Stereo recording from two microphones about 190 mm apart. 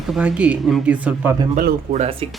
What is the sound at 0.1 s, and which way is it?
Speech, 5° right (ahead or behind).